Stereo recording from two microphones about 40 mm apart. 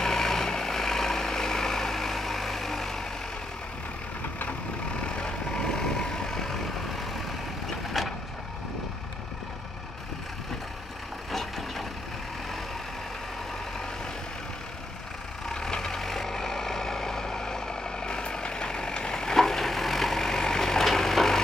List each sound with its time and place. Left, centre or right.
0.0 s vehicle: centre
5.0 s vehicle: left
8.0 s vehicle: centre
11.3 s vehicle: centre
15.4 s vehicle: centre